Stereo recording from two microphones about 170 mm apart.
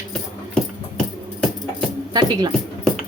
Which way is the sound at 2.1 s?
25° right (ahead or behind).